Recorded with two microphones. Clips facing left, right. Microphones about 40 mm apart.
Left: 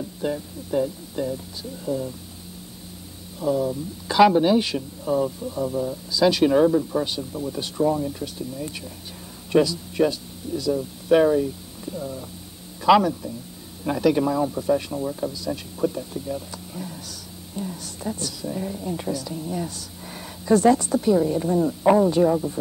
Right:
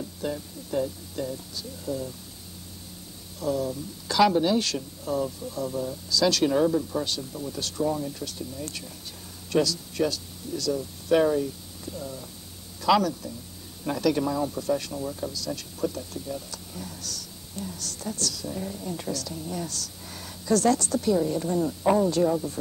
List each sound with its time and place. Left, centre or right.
0.2 s speech: centre
3.3 s a man's voice: centre